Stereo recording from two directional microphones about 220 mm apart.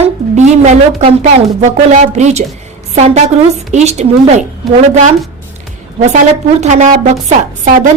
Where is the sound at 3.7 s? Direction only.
30° right (ahead or behind).